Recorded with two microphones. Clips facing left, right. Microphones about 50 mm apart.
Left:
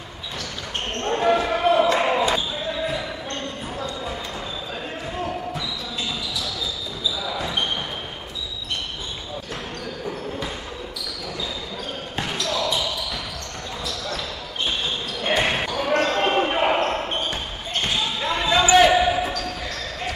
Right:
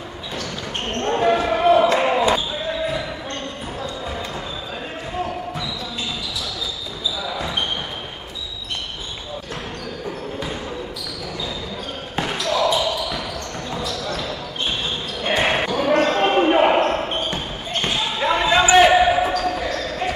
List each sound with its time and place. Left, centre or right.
1.0 s basketball bounce: centre
12.2 s basketball bounce: centre
15.3 s basketball bounce: right